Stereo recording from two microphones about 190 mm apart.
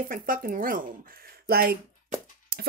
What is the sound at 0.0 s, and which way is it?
Speech, 45° right (ahead or behind).